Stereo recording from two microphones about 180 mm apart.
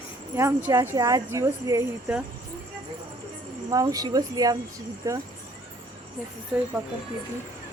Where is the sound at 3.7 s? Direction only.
20° right (ahead or behind).